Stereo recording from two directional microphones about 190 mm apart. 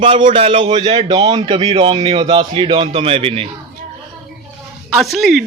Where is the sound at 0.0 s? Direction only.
25° right (ahead or behind).